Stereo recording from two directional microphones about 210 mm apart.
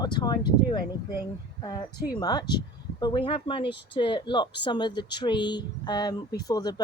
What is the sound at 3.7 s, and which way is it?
Speech, 55° left (ahead or behind).